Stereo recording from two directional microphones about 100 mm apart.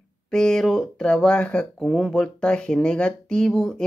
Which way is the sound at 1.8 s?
Centre (ahead or behind).